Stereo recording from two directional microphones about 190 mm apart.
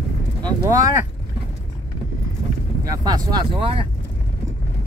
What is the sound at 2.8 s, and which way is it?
Speech, 20° right (ahead or behind).